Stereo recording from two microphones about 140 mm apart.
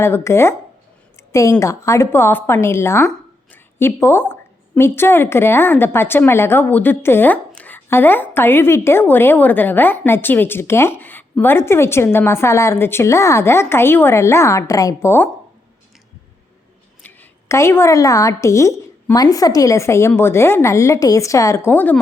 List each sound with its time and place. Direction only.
0.0 s a woman's voice: 20° left (ahead or behind)
17.0 s speech: 15° left (ahead or behind)